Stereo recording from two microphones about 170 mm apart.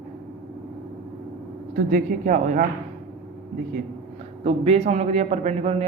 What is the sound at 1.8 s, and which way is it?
Speech, 55° right (ahead or behind).